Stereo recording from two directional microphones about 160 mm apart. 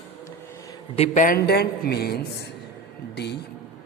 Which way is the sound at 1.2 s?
65° left (ahead or behind).